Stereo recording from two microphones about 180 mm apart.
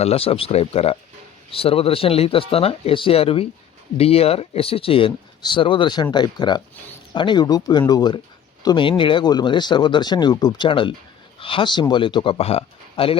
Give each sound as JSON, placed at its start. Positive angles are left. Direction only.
{"t": 0.0, "sound": "speech", "side_deg": 35}